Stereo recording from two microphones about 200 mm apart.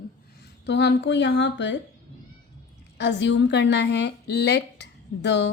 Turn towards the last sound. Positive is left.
turn(degrees=60)  # may be behind; listen again after turning